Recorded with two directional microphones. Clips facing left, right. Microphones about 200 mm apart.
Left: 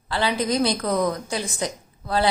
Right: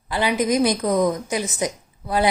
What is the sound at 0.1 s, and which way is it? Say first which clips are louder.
A woman's voice: right 3 dB; 15° right (ahead or behind).